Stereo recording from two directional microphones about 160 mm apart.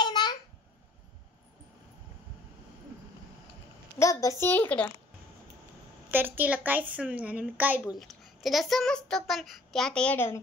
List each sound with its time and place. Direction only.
0.0 s babbling: 25° left (ahead or behind)
4.0 s a child's voice: 20° left (ahead or behind)
6.0 s a woman's voice: 10° right (ahead or behind); by 10.4 s 15° left (ahead or behind)